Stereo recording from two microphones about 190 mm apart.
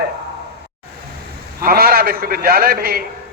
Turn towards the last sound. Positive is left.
turn(degrees=-50)  # may be behind; listen again after turning